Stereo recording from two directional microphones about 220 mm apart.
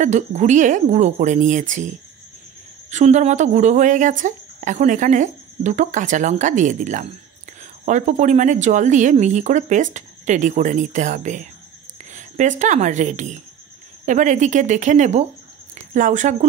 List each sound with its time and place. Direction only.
0.0 s a woman's voice: 35° right (ahead or behind)